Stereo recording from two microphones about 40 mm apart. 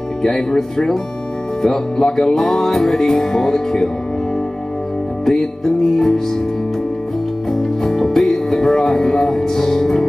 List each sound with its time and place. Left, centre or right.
0.2 s music: centre
5.2 s music: centre
7.5 s music: centre